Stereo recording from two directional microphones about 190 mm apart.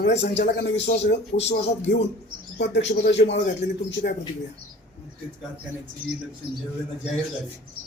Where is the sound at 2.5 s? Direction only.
65° left (ahead or behind).